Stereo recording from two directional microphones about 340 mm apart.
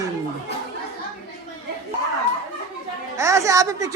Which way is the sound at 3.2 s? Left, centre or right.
Centre.